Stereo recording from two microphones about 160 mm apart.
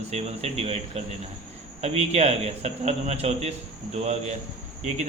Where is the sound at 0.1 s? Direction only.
40° right (ahead or behind).